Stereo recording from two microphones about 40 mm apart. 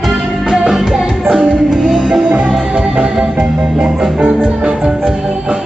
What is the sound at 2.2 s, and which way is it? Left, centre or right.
Music, right.